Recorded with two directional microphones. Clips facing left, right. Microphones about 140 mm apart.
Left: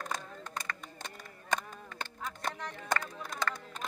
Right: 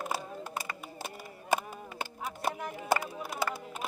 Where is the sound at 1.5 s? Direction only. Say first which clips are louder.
Right 4 dB; 10° right (ahead or behind).